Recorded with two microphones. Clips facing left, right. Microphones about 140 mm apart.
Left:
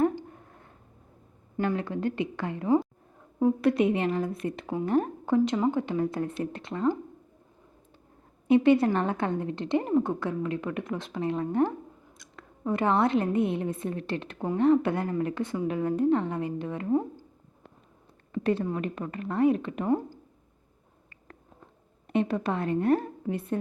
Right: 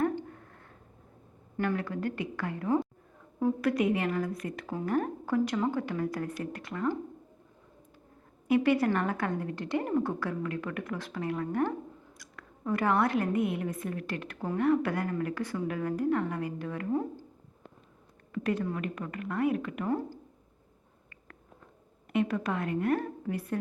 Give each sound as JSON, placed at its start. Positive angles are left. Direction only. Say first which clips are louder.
{"t": 0.0, "sound": "a sound", "louder": "left 4 dB", "side_deg": 20}
{"t": 1.5, "sound": "a woman's voice", "louder": "left 3 dB", "side_deg": 20}
{"t": 8.4, "sound": "a woman's voice", "louder": "left 5 dB", "side_deg": 25}
{"t": 18.3, "sound": "a woman's voice", "louder": "left 4 dB", "side_deg": 30}
{"t": 22.1, "sound": "a woman's voice", "louder": "left 2 dB", "side_deg": 30}